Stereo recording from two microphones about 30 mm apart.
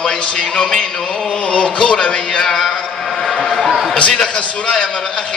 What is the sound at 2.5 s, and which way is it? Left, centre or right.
Speech, centre.